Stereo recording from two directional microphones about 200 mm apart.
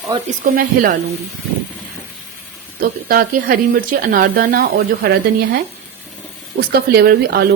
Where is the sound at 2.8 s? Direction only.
45° right (ahead or behind).